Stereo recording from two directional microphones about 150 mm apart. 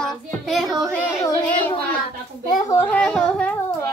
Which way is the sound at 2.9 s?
10° left (ahead or behind).